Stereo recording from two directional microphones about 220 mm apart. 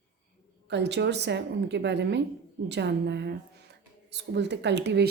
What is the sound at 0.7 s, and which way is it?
Speech, 50° right (ahead or behind).